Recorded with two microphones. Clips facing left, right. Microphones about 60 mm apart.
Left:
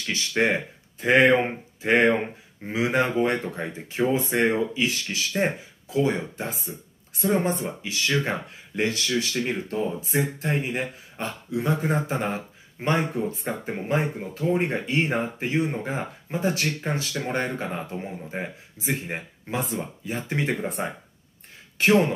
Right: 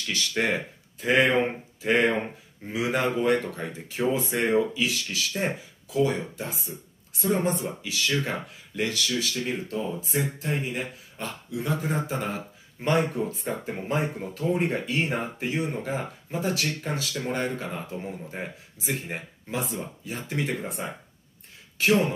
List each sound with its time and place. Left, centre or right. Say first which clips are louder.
0.0 s speech: left 3 dB; left
11.8 s speech: left 3 dB; left